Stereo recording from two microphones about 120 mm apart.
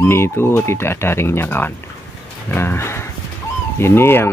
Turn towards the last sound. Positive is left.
turn(degrees=20)  # may be behind; listen again after turning